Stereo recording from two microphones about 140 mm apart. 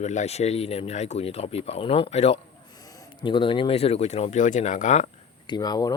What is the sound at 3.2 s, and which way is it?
Speech, 35° left (ahead or behind).